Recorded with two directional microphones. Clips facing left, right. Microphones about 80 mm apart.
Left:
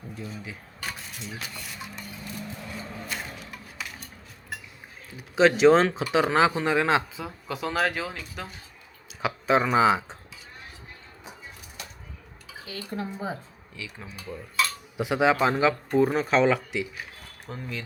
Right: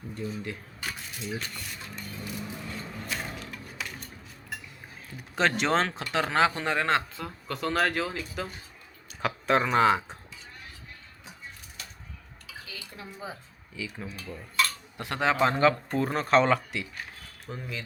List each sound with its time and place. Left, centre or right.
0.1 s speech: centre
3.1 s a sound: centre
5.1 s speech: centre
12.6 s speech: left
13.7 s speech: centre